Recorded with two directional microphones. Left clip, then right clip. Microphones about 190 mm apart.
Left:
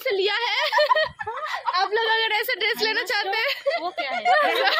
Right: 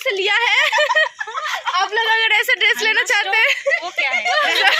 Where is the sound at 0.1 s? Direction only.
5° right (ahead or behind).